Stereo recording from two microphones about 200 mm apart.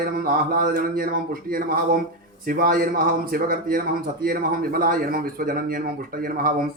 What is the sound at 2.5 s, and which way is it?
A man's voice, 45° right (ahead or behind).